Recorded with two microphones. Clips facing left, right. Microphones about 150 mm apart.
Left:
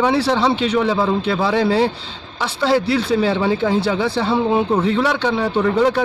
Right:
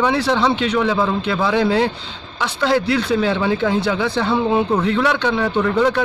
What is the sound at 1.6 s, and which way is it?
Speech, 5° left (ahead or behind).